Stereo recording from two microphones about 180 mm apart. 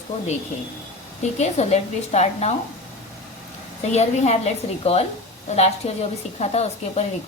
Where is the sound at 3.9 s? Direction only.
40° left (ahead or behind).